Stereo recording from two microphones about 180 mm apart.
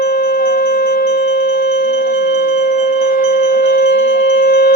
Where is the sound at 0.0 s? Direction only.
55° left (ahead or behind).